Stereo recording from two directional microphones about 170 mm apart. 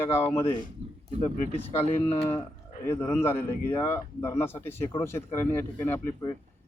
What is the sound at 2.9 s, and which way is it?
Speech, 10° left (ahead or behind).